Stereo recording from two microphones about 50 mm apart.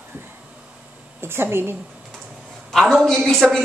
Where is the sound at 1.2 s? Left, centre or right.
Right.